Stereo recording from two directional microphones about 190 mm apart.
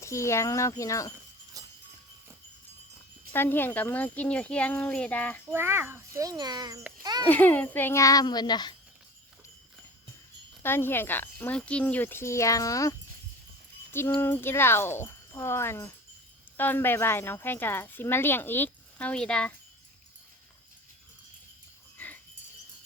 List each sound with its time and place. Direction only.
0.0 s speech: 15° left (ahead or behind)
1.6 s a sound: 20° right (ahead or behind)
3.3 s speech: 10° left (ahead or behind)
5.5 s a child's voice: 10° right (ahead or behind)
7.3 s speech: 10° left (ahead or behind)
10.6 s speech: 10° left (ahead or behind)
14.2 s speech: 10° left (ahead or behind)
21.9 s dog: 10° left (ahead or behind)